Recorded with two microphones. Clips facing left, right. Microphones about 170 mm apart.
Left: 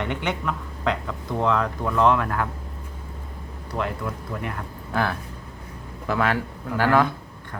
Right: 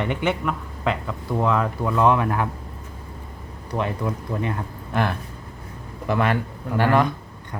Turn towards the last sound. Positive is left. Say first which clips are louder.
# right 1 dB
turn(degrees=0)  # may be behind; listen again after turning